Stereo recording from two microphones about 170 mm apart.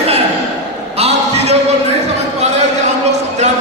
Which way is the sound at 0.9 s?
35° right (ahead or behind).